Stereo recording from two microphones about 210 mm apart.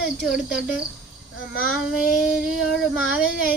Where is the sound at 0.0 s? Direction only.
Centre (ahead or behind).